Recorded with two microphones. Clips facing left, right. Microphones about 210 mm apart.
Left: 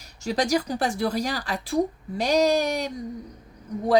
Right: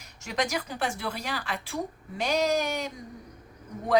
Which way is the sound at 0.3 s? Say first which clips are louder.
Left 7 dB; 35° left (ahead or behind).